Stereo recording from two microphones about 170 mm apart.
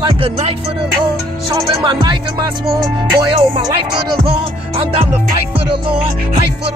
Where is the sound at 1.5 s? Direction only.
25° right (ahead or behind).